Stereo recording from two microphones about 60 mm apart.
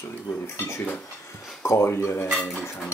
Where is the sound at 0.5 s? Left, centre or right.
Left.